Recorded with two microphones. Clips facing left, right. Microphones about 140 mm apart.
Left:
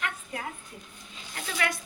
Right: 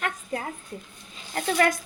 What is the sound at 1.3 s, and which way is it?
Speech, 45° right (ahead or behind).